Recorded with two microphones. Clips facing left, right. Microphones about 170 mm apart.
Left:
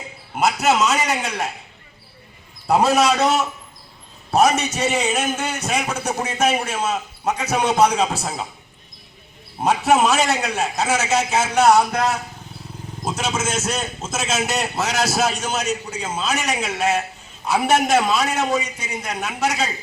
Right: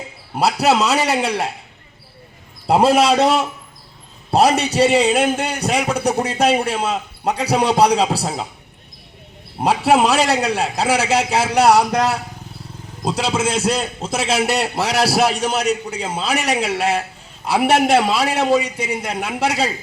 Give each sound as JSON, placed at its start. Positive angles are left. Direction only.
{"t": 0.3, "sound": "a man's voice", "side_deg": -35}
{"t": 2.6, "sound": "a man's voice", "side_deg": -30}
{"t": 9.6, "sound": "a man's voice", "side_deg": -30}